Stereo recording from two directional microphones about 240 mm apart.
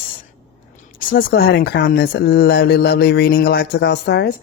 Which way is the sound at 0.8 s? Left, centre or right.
Left.